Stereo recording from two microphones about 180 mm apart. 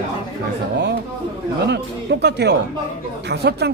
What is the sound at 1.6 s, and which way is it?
Speech, 70° right (ahead or behind).